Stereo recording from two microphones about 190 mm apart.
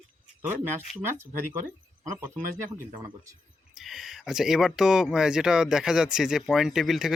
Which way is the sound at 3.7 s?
Centre (ahead or behind).